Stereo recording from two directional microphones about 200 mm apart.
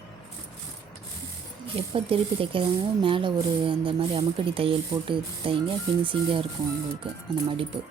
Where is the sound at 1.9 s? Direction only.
25° right (ahead or behind).